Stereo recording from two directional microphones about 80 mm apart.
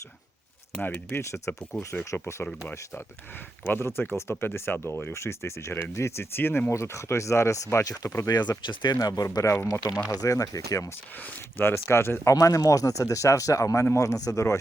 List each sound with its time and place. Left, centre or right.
0.8 s speech: left
1.2 s speech: left
2.1 s speech: left
3.6 s speech: left
8.3 s speech: left
9.0 s speech: left
11.5 s speech: left
12.3 s speech: left